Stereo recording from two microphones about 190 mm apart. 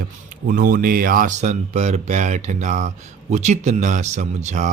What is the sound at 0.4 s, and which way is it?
Speech, 45° right (ahead or behind).